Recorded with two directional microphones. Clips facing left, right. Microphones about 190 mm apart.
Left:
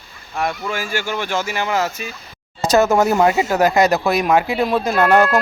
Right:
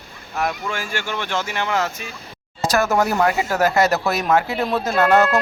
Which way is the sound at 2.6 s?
20° left (ahead or behind).